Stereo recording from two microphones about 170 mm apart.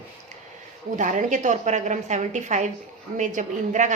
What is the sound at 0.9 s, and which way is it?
A woman's voice, 45° right (ahead or behind).